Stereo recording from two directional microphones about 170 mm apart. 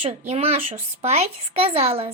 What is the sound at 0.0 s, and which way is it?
Speech, 35° right (ahead or behind).